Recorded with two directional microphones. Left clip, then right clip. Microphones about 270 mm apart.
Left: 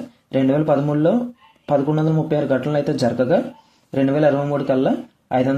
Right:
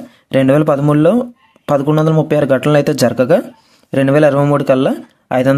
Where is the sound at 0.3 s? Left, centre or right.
Right.